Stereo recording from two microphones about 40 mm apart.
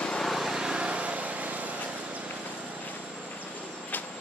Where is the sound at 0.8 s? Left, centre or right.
Right.